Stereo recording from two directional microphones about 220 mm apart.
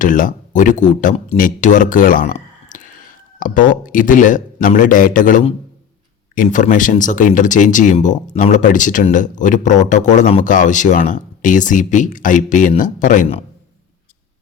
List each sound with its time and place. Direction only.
0.0 s speech: 35° left (ahead or behind)